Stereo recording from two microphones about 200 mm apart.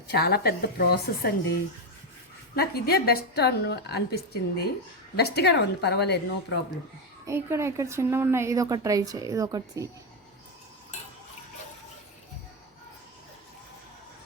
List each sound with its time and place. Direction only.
0.1 s a woman's voice: 55° left (ahead or behind)
2.6 s a woman's voice: 50° left (ahead or behind)
7.3 s a woman's voice: 15° right (ahead or behind)